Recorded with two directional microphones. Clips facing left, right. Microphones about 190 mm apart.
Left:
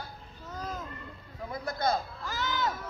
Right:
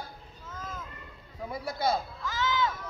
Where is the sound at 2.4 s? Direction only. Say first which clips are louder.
Right 3 dB; 40° left (ahead or behind).